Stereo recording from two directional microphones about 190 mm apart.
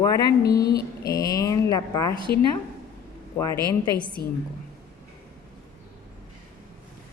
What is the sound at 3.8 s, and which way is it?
Speech, 20° left (ahead or behind).